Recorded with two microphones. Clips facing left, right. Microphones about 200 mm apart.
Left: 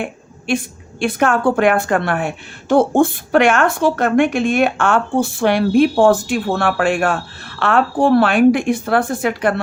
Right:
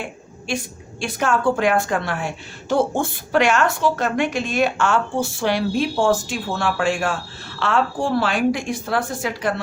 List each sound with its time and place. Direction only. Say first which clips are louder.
0.0 s a woman's voice: left 6 dB; 55° left (ahead or behind)